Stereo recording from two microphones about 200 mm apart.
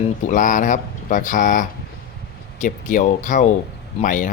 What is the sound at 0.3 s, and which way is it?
Speech, 40° left (ahead or behind).